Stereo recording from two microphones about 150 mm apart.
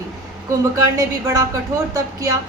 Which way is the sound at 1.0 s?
25° right (ahead or behind).